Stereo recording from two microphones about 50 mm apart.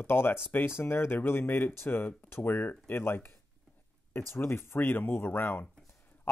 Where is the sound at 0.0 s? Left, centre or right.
Left.